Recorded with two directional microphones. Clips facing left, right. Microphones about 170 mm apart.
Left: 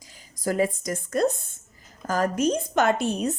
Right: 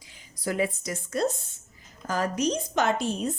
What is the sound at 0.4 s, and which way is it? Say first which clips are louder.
A woman's voice: left 4 dB; 40° left (ahead or behind).